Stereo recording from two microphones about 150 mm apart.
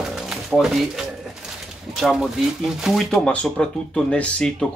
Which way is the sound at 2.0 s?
Centre (ahead or behind).